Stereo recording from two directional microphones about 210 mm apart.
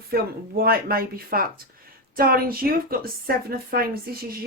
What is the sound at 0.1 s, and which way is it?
A woman's voice, 45° right (ahead or behind).